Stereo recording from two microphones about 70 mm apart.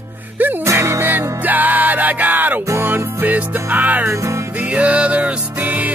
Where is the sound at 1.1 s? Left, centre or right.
Right.